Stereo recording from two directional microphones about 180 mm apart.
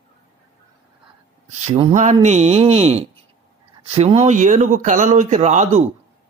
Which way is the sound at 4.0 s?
35° right (ahead or behind).